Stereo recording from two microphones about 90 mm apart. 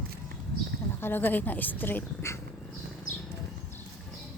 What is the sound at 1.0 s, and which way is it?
Speech, 20° left (ahead or behind).